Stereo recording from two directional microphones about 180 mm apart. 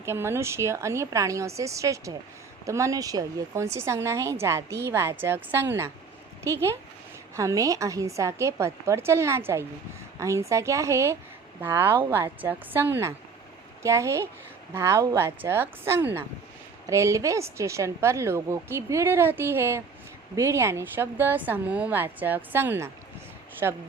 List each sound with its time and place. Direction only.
0.0 s a woman's voice: 15° right (ahead or behind)